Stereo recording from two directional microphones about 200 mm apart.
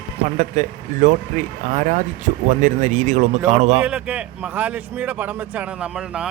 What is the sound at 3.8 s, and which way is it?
A man's voice, 5° right (ahead or behind).